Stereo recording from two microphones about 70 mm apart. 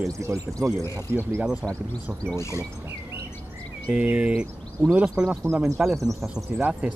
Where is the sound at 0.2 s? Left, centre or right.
Right.